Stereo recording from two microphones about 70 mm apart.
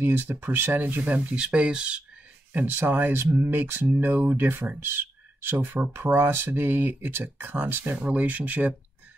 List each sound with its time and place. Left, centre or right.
0.0 s speech: right; by 2.0 s centre
2.5 s speech: right